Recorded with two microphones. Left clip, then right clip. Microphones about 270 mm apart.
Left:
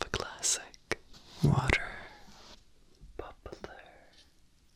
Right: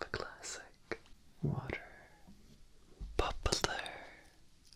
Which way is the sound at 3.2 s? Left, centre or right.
Right.